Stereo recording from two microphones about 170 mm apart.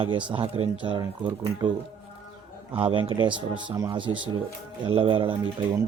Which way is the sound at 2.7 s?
30° right (ahead or behind).